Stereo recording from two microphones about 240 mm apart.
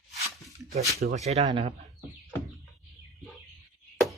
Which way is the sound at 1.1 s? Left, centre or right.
Right.